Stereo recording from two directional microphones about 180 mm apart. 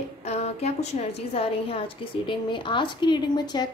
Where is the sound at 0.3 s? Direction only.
35° left (ahead or behind).